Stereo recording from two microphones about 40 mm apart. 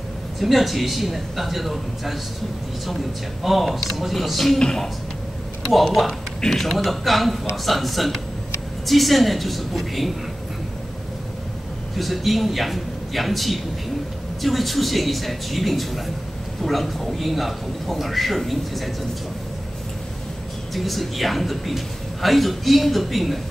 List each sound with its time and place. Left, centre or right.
0.4 s a man's voice: centre
3.4 s a man's voice: centre
4.6 s speech: centre
5.7 s a man's voice: centre
12.0 s a man's voice: centre
20.7 s a man's voice: centre